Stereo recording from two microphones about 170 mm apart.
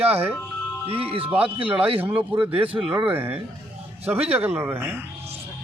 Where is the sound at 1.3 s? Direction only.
10° right (ahead or behind).